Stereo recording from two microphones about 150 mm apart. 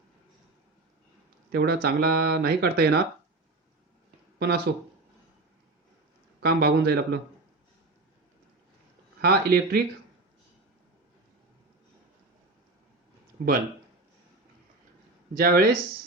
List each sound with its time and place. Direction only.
1.5 s speech: 90° right
4.4 s speech: 90° right
6.4 s speech: 90° right
9.2 s speech: 90° right
15.4 s speech: 75° right (ahead or behind)